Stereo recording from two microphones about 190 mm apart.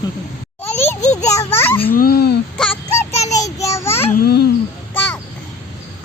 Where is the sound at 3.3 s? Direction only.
15° left (ahead or behind).